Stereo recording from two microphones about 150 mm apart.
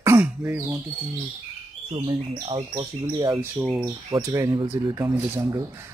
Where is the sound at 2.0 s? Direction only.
20° right (ahead or behind).